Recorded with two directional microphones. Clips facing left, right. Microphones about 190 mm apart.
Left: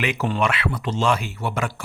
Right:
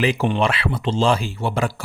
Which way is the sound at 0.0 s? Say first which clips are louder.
Right 4 dB; 30° right (ahead or behind).